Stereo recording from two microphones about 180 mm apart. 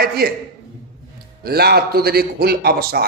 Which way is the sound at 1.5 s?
60° right (ahead or behind).